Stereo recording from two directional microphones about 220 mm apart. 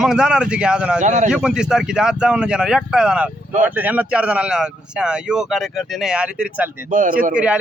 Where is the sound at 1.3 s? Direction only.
5° right (ahead or behind).